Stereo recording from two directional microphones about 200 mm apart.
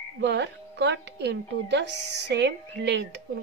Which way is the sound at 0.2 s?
55° right (ahead or behind).